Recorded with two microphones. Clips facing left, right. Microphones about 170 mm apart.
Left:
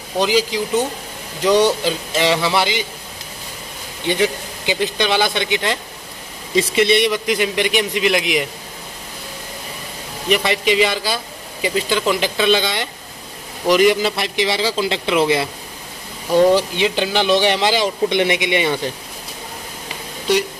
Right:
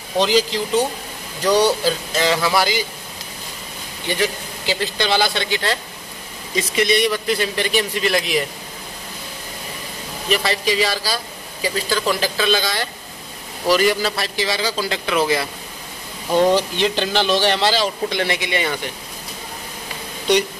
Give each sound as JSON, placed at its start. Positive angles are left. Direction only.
{"t": 0.2, "sound": "a man's voice", "side_deg": 10}
{"t": 4.1, "sound": "a man's voice", "side_deg": 20}
{"t": 10.4, "sound": "a man's voice", "side_deg": 20}
{"t": 16.5, "sound": "speech", "side_deg": 10}
{"t": 20.3, "sound": "speech", "side_deg": 0}